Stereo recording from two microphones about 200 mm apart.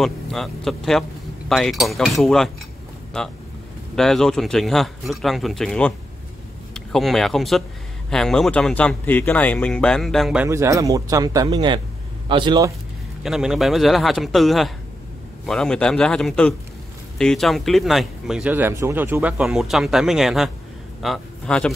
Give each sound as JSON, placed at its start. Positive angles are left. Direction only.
{"t": 0.0, "sound": "speech", "side_deg": 0}
{"t": 3.9, "sound": "speech", "side_deg": 0}
{"t": 13.2, "sound": "a man's voice", "side_deg": 0}